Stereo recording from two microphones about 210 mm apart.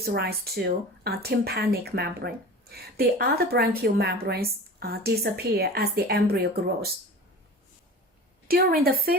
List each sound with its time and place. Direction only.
0.0 s speech: 50° right (ahead or behind)
8.4 s speech: 45° right (ahead or behind)